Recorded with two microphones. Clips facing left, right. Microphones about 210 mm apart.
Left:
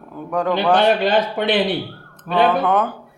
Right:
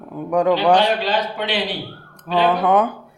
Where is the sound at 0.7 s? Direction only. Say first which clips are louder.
Left 2 dB; 55° left (ahead or behind).